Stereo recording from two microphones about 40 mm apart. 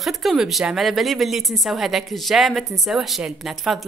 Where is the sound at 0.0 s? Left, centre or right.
Centre.